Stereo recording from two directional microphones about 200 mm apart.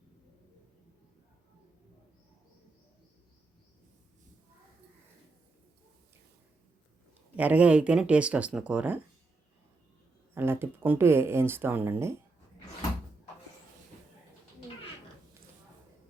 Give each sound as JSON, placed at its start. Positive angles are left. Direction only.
{"t": 7.3, "sound": "speech", "side_deg": -5}
{"t": 10.3, "sound": "speech", "side_deg": -10}